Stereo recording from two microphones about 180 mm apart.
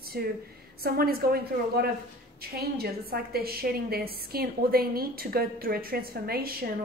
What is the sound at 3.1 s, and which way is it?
A woman's voice, 60° right (ahead or behind).